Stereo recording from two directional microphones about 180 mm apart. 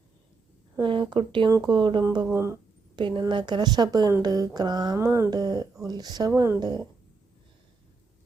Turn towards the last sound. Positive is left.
turn(degrees=-20)  # may be behind; listen again after turning